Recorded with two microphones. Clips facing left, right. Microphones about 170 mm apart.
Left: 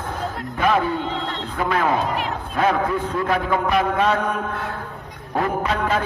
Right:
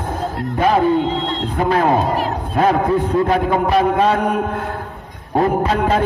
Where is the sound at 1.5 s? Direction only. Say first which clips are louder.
Right 5 dB; 35° right (ahead or behind).